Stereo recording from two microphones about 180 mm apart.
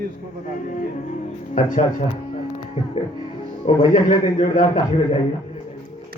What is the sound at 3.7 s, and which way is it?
Speech, 40° left (ahead or behind).